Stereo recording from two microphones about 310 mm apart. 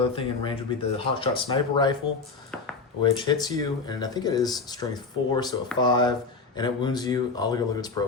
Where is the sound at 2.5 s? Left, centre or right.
Centre.